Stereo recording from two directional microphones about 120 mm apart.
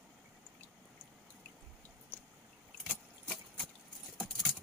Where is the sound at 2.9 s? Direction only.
Centre (ahead or behind).